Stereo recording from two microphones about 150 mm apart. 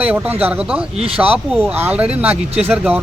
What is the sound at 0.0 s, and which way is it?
Speech, 10° right (ahead or behind).